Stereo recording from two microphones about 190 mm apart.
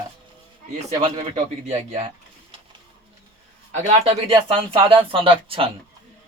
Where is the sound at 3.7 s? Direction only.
35° right (ahead or behind).